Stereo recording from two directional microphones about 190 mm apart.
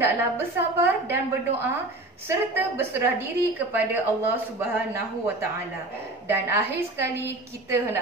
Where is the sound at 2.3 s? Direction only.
10° right (ahead or behind).